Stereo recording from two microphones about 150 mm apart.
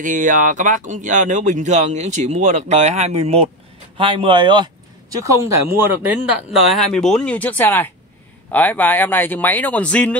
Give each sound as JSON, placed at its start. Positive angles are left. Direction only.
{"t": 0.0, "sound": "speech", "side_deg": -60}
{"t": 5.4, "sound": "speech", "side_deg": -15}
{"t": 6.0, "sound": "speech", "side_deg": -5}